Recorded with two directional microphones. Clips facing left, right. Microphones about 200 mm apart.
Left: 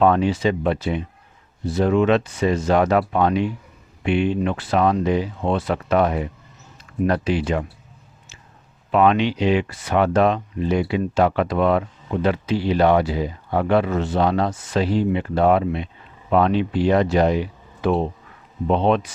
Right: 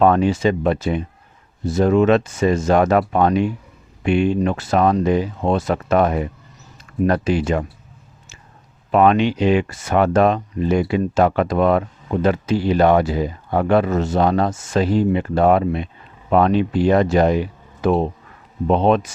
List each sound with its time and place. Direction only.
0.0 s speech: 50° right (ahead or behind)
8.9 s speech: 45° right (ahead or behind)